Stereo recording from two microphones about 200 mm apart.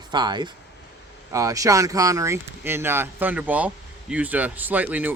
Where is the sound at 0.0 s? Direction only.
20° right (ahead or behind).